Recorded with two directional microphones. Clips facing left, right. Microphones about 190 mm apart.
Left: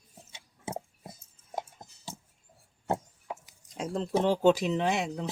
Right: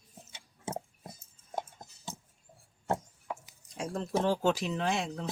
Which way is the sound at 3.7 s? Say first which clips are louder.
Left 3 dB; 20° left (ahead or behind).